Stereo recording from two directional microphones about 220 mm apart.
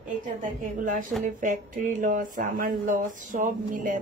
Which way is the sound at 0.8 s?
35° right (ahead or behind).